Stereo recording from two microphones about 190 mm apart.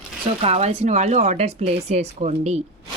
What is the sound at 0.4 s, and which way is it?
Speech, 35° right (ahead or behind).